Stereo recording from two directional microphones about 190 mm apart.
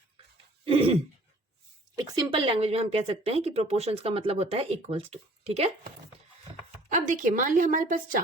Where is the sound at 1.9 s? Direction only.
20° right (ahead or behind).